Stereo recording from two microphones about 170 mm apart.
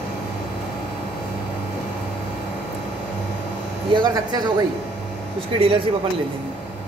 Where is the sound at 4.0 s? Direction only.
25° right (ahead or behind).